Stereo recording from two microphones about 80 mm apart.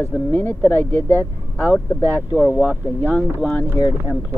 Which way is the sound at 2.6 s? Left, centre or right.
Left.